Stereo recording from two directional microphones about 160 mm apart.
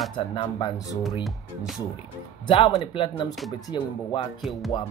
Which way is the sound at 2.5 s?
35° left (ahead or behind).